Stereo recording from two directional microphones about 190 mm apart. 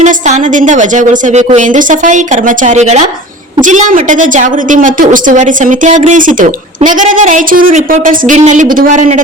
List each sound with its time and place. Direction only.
0.0 s a woman's voice: 40° right (ahead or behind)